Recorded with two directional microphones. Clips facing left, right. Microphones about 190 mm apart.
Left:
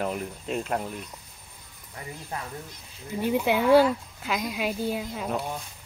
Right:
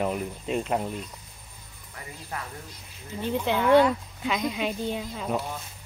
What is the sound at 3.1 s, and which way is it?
A woman's voice, 10° left (ahead or behind).